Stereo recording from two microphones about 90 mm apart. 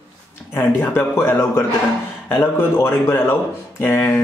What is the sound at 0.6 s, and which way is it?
Speech, 25° left (ahead or behind).